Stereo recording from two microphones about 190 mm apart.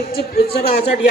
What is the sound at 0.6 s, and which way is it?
Speech, 35° left (ahead or behind).